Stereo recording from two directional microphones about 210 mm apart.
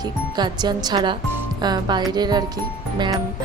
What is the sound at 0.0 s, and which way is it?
A woman's voice, 20° right (ahead or behind).